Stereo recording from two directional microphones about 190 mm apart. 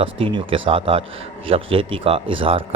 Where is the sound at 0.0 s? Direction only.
30° right (ahead or behind).